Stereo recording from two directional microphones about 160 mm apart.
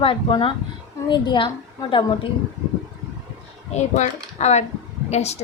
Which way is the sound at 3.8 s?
45° left (ahead or behind).